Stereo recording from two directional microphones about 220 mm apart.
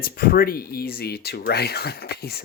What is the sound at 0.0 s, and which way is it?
Speech, 40° left (ahead or behind).